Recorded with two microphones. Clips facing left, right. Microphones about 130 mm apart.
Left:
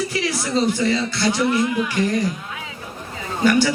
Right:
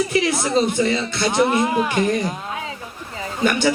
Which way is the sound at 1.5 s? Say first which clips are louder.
Right 2 dB; 45° right (ahead or behind).